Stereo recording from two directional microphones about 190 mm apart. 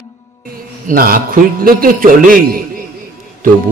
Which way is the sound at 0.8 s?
45° right (ahead or behind).